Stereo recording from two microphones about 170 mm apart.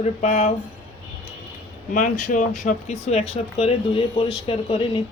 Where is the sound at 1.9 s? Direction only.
50° left (ahead or behind).